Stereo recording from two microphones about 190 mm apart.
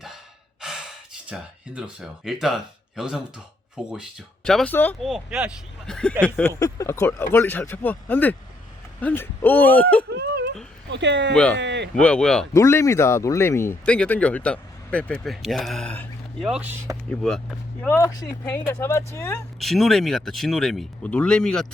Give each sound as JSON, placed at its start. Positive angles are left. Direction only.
{"t": 0.6, "sound": "gasp", "side_deg": -5}
{"t": 1.3, "sound": "speech", "side_deg": -5}
{"t": 10.2, "sound": "whimper", "side_deg": -60}
{"t": 10.9, "sound": "speech", "side_deg": -70}
{"t": 11.9, "sound": "speech", "side_deg": 5}
{"t": 12.5, "sound": "speech", "side_deg": 15}
{"t": 16.5, "sound": "speech", "side_deg": -10}
{"t": 17.1, "sound": "speech", "side_deg": 0}
{"t": 17.8, "sound": "speech", "side_deg": 15}
{"t": 19.5, "sound": "speech", "side_deg": 0}